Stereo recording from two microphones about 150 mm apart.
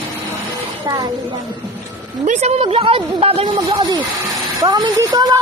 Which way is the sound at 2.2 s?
50° right (ahead or behind).